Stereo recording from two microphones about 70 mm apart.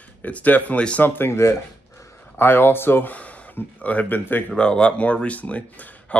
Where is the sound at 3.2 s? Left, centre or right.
Centre.